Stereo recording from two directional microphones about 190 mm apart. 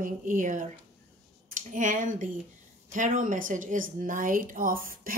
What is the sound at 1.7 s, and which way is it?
Speech, 40° right (ahead or behind).